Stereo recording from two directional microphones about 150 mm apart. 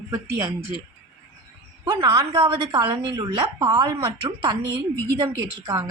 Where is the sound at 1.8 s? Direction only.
30° right (ahead or behind).